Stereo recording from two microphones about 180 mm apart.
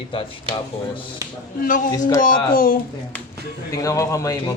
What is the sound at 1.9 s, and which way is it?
Speech, 20° left (ahead or behind).